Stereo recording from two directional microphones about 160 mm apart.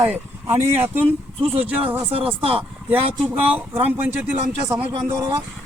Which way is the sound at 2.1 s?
35° right (ahead or behind).